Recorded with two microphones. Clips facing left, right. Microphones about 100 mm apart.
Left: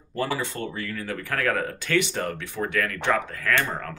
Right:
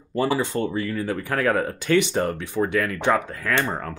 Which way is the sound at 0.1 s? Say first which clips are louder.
Right 5 dB; 20° right (ahead or behind).